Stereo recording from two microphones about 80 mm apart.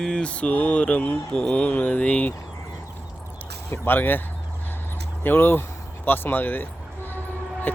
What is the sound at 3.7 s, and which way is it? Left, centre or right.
Speech, left.